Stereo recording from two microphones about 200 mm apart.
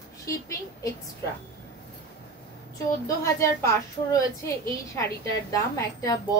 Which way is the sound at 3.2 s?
15° left (ahead or behind).